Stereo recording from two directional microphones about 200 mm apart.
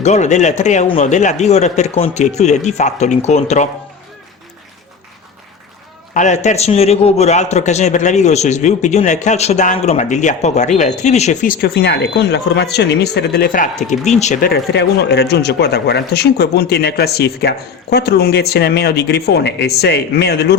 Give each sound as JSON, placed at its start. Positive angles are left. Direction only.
{"t": 0.0, "sound": "a man's voice", "side_deg": 35}
{"t": 6.1, "sound": "a man's voice", "side_deg": 35}
{"t": 14.5, "sound": "speech", "side_deg": 55}